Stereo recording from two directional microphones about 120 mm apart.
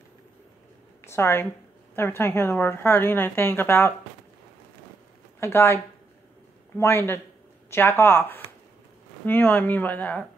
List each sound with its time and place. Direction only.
1.0 s a woman's voice: 20° left (ahead or behind)
5.4 s speech: 20° left (ahead or behind)
6.8 s a woman's voice: 20° left (ahead or behind)